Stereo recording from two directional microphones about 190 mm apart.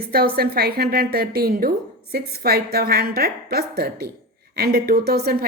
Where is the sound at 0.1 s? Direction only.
55° right (ahead or behind).